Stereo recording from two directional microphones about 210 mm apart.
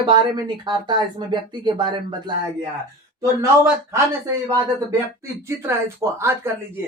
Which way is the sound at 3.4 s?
15° right (ahead or behind).